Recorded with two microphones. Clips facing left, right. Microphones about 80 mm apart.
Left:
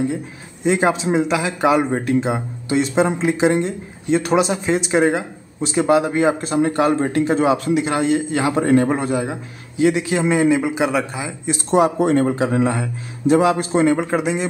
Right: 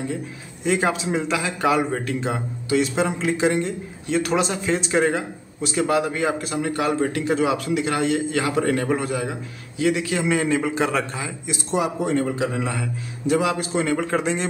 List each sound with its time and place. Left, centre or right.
0.7 s a man's voice: left
11.7 s speech: left
13.9 s a man's voice: centre